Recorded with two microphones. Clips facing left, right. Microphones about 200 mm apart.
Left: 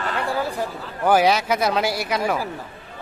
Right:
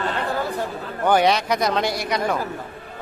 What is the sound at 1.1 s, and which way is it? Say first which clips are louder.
Speech: left 1 dB; 5° left (ahead or behind).